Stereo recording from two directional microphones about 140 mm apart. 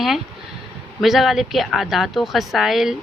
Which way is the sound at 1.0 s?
Centre (ahead or behind).